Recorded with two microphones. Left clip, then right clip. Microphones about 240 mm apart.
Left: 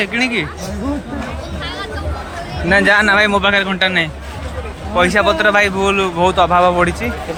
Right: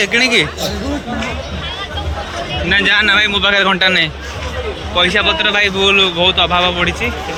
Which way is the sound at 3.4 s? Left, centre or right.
Centre.